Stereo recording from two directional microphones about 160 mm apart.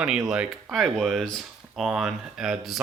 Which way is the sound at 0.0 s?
5° right (ahead or behind).